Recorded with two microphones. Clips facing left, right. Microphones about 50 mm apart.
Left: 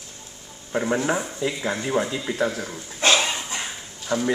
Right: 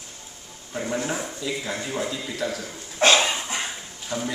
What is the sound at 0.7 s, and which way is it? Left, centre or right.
Speech, left.